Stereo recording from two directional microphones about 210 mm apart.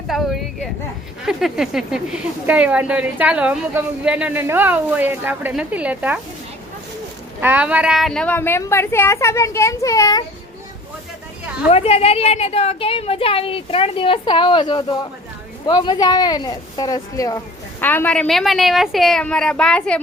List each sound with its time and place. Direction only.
0.1 s a sound: centre (ahead or behind)
1.2 s speech: centre (ahead or behind)
7.4 s a woman's voice: 5° right (ahead or behind); by 10.2 s 20° left (ahead or behind)
11.7 s a woman's voice: 30° left (ahead or behind); by 20.0 s 5° left (ahead or behind)